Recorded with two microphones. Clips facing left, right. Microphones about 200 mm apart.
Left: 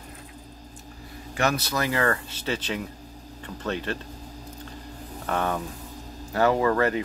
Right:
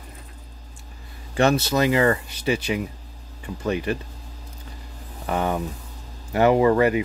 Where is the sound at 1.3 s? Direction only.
25° right (ahead or behind); by 3.9 s 10° right (ahead or behind).